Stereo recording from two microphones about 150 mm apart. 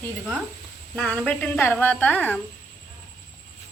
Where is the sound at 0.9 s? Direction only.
10° left (ahead or behind).